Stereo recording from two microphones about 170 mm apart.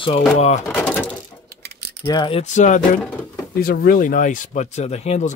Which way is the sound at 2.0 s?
30° left (ahead or behind).